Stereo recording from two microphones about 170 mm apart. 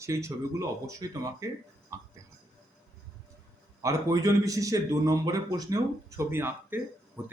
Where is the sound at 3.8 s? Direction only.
20° right (ahead or behind).